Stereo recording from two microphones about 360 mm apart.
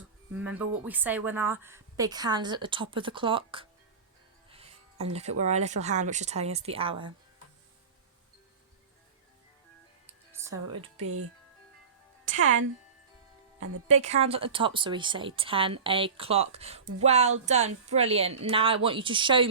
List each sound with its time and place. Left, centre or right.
0.3 s speech: centre
10.1 s music: centre
11.0 s speech: right
12.4 s speech: right
13.8 s speech: centre